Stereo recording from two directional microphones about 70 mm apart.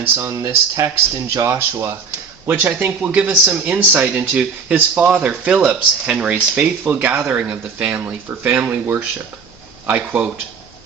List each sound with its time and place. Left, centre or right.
0.0 s speech: right
2.5 s speech: right